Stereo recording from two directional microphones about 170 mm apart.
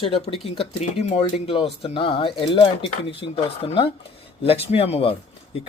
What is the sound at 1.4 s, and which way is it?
Speech, 35° left (ahead or behind).